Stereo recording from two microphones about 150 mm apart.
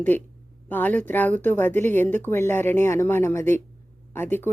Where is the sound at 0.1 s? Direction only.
10° left (ahead or behind).